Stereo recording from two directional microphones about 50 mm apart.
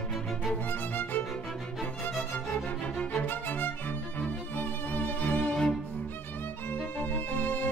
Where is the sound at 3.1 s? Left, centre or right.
Left.